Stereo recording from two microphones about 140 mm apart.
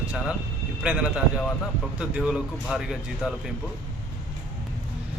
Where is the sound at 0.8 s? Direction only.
5° right (ahead or behind).